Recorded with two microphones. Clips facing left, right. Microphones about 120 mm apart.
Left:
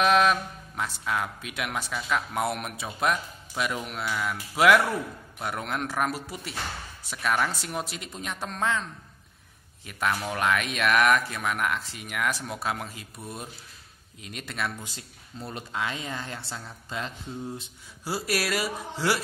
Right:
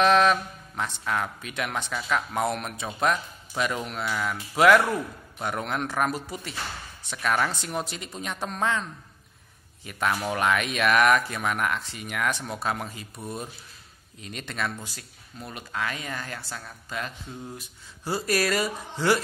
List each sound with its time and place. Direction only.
0.0 s speech: 5° left (ahead or behind)
9.8 s speech: centre (ahead or behind)
14.8 s speech: 20° left (ahead or behind)
18.0 s speech: 5° left (ahead or behind)